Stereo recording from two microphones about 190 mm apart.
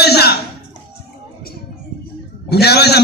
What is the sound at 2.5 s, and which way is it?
Speech, 60° left (ahead or behind).